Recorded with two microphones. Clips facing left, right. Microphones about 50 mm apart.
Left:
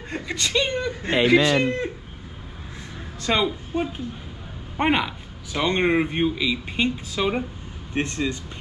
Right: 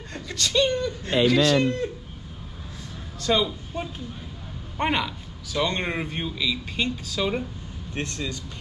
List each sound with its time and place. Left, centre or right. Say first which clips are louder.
0.1 s a man's voice: left 1 dB; left
3.2 s a man's voice: left 1 dB; left